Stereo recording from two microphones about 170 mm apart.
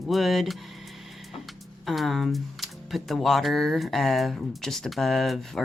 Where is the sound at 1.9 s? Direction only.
Centre (ahead or behind).